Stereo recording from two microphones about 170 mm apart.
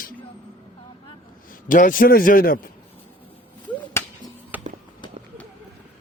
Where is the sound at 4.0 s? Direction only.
15° left (ahead or behind).